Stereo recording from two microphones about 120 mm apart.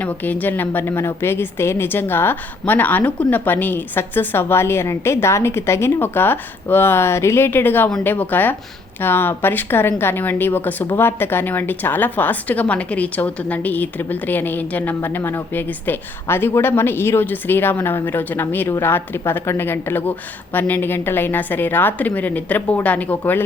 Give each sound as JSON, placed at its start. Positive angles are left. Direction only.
{"t": 0.0, "sound": "a woman's voice", "side_deg": 15}